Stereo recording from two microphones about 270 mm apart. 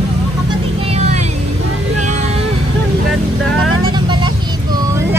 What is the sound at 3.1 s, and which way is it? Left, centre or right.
Speech, centre.